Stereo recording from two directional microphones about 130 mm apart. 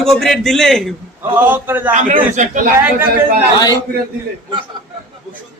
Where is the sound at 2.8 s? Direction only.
15° right (ahead or behind).